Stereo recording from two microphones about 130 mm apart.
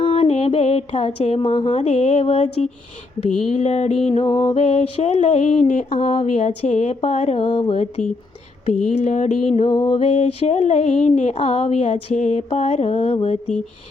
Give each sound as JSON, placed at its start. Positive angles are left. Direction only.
{"t": 0.0, "sound": "a sound", "side_deg": 50}
{"t": 3.5, "sound": "music", "side_deg": 65}
{"t": 4.2, "sound": "music", "side_deg": 30}
{"t": 4.5, "sound": "music", "side_deg": 55}
{"t": 7.4, "sound": "mantra", "side_deg": 40}
{"t": 8.6, "sound": "music", "side_deg": 60}
{"t": 9.6, "sound": "music", "side_deg": 35}
{"t": 10.0, "sound": "music", "side_deg": 55}
{"t": 11.3, "sound": "mantra", "side_deg": 55}